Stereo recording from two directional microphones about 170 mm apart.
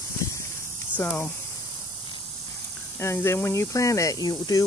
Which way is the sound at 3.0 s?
15° left (ahead or behind).